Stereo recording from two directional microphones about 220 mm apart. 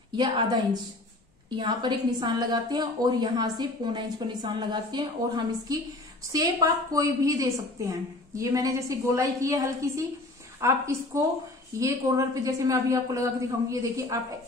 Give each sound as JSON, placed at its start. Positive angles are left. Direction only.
{"t": 0.1, "sound": "a woman's voice", "side_deg": -20}
{"t": 1.6, "sound": "a woman's voice", "side_deg": -20}